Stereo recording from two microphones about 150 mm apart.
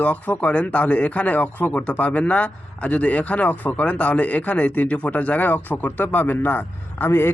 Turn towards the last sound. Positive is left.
turn(degrees=15)  # may be behind; listen again after turning